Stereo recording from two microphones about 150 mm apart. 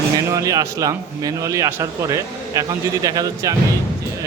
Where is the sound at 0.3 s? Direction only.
20° right (ahead or behind).